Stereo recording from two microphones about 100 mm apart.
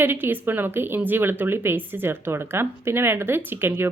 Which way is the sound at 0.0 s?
20° right (ahead or behind).